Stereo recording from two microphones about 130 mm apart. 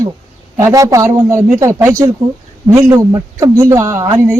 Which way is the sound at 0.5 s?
20° right (ahead or behind).